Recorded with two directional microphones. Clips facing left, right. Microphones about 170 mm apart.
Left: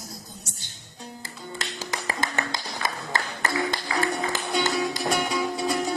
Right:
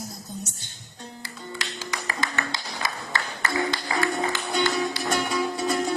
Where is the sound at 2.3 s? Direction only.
45° left (ahead or behind).